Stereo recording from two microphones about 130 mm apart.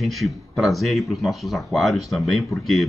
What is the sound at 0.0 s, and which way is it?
A man's voice, centre (ahead or behind).